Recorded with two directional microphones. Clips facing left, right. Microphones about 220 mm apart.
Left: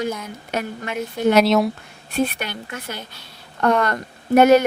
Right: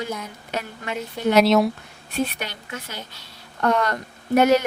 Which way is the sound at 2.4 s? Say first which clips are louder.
Left 3 dB; 55° left (ahead or behind).